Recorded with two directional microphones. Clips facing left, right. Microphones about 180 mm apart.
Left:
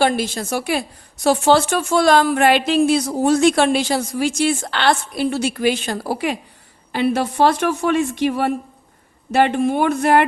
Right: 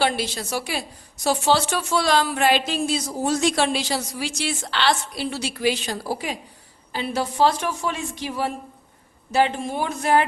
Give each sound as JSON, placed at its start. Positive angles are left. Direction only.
{"t": 0.0, "sound": "a woman's voice", "side_deg": 50}